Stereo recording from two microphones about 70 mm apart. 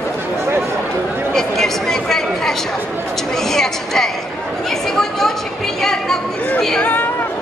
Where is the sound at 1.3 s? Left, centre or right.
Centre.